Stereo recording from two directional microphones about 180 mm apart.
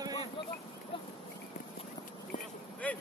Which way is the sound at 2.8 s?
5° left (ahead or behind).